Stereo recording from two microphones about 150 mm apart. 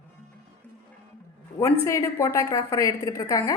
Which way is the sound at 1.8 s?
20° left (ahead or behind).